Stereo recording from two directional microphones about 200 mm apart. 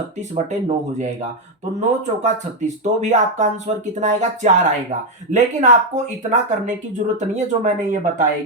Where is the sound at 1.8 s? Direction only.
35° right (ahead or behind).